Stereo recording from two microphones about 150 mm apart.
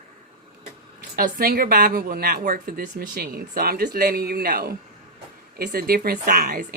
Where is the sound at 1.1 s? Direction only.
80° right.